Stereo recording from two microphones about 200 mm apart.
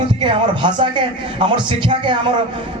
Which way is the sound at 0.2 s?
25° right (ahead or behind).